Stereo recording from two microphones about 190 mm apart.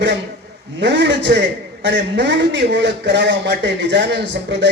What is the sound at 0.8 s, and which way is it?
A man's voice, 65° right (ahead or behind).